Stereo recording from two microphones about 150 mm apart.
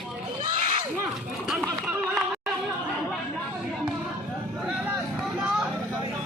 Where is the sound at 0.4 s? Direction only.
60° right (ahead or behind).